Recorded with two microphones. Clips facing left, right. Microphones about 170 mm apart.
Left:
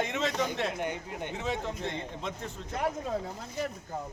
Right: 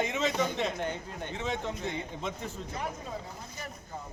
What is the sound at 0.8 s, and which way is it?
Speech, 15° left (ahead or behind).